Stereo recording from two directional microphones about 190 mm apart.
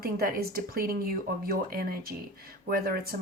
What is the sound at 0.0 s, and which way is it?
A woman's voice, 50° right (ahead or behind).